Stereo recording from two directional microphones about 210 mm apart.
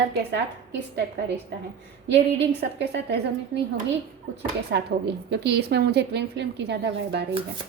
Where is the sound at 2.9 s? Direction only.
50° right (ahead or behind).